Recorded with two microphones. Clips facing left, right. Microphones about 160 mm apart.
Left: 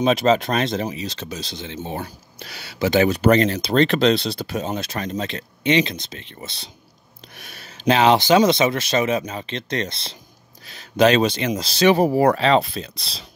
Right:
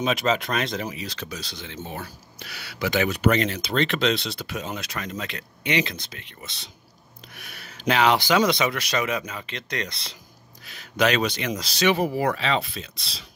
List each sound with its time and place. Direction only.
0.0 s speech: 30° left (ahead or behind)